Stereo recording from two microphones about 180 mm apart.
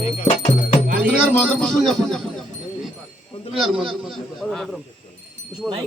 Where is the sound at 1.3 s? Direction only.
10° left (ahead or behind).